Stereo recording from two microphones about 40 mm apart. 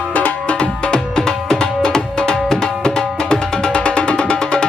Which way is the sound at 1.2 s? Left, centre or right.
Centre.